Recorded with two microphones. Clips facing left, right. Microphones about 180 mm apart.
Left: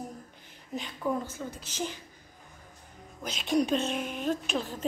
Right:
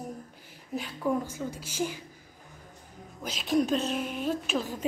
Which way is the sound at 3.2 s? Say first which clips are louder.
Right 1 dB; centre (ahead or behind).